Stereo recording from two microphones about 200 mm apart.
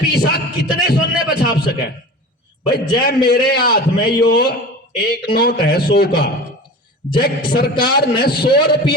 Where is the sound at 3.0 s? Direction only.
50° left (ahead or behind).